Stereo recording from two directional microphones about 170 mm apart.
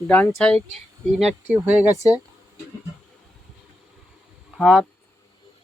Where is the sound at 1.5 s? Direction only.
15° right (ahead or behind).